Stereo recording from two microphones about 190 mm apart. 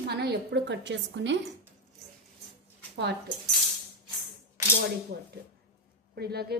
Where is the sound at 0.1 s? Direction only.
60° right (ahead or behind).